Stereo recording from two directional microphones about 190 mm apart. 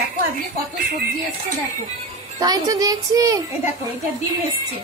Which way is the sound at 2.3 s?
20° right (ahead or behind).